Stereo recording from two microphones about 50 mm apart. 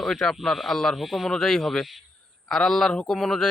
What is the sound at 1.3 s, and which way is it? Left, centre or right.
A man's voice, centre.